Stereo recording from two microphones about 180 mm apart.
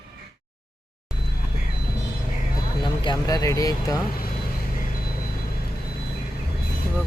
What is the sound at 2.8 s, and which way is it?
Speech, 25° left (ahead or behind).